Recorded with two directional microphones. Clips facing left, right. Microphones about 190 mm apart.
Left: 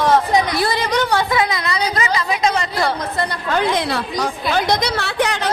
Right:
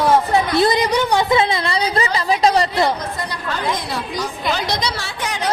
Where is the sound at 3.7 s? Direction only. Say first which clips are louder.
Left 4 dB; 75° left (ahead or behind).